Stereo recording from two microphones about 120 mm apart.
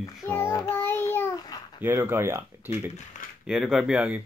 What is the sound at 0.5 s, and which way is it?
Child singing, 30° left (ahead or behind).